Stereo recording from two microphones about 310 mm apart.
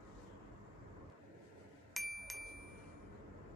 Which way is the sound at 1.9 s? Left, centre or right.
Centre.